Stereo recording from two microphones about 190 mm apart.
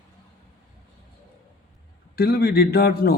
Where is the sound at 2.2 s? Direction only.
55° left (ahead or behind).